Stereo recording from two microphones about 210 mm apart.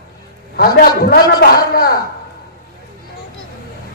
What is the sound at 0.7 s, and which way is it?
A man's voice, 50° left (ahead or behind).